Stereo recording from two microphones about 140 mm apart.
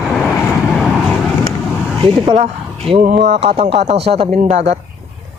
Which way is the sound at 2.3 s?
45° right (ahead or behind).